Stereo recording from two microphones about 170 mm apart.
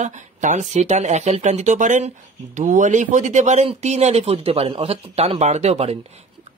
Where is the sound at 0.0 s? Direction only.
45° right (ahead or behind).